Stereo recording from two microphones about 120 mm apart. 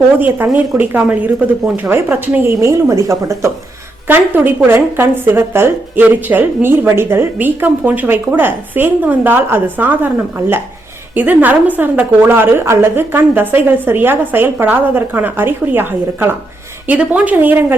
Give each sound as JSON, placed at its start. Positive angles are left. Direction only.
{"t": 0.2, "sound": "a woman's voice", "side_deg": -15}
{"t": 11.1, "sound": "a woman's voice", "side_deg": -15}